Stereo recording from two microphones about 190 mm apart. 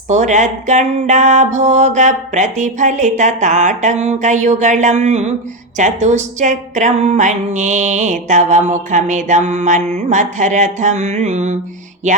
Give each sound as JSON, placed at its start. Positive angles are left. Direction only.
{"t": 0.1, "sound": "speech", "side_deg": -40}